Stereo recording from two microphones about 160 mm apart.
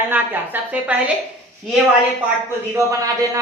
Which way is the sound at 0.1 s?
10° right (ahead or behind).